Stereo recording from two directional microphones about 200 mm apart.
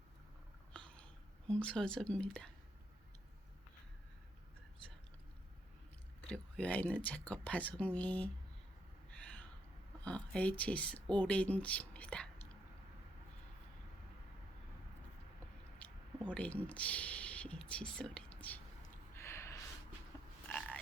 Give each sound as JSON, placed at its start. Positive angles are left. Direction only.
{"t": 0.7, "sound": "a sound", "side_deg": 5}
{"t": 1.5, "sound": "speech", "side_deg": 5}
{"t": 6.2, "sound": "speech", "side_deg": 5}
{"t": 9.0, "sound": "a sound", "side_deg": 5}
{"t": 10.0, "sound": "speech", "side_deg": 5}
{"t": 15.8, "sound": "speech", "side_deg": 5}
{"t": 19.1, "sound": "gasp", "side_deg": 15}
{"t": 20.1, "sound": "frog", "side_deg": 15}